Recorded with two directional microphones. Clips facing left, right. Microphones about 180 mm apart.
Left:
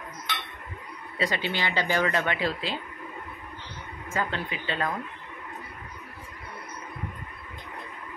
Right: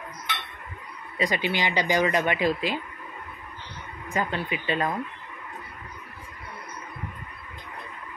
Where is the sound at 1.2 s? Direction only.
15° right (ahead or behind).